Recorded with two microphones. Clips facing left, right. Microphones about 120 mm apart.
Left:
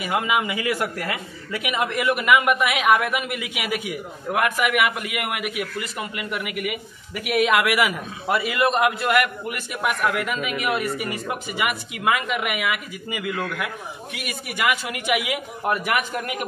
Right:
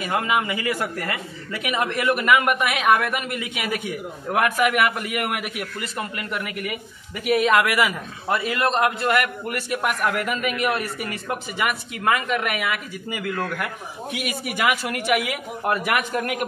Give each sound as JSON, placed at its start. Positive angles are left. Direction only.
{"t": 0.0, "sound": "a man's voice", "side_deg": 15}
{"t": 7.2, "sound": "speech", "side_deg": -30}
{"t": 7.5, "sound": "a man's voice", "side_deg": 15}